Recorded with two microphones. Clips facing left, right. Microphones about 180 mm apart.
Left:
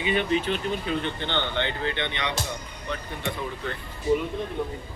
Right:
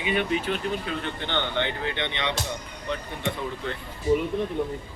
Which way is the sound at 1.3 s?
15° right (ahead or behind).